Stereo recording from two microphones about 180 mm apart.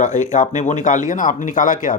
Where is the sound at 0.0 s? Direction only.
45° left (ahead or behind).